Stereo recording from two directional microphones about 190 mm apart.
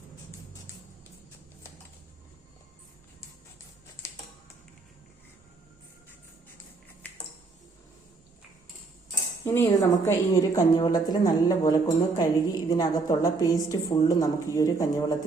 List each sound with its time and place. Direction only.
4.0 s typing: 15° left (ahead or behind)
7.0 s a sound: 10° left (ahead or behind)
9.5 s a woman's voice: 15° left (ahead or behind)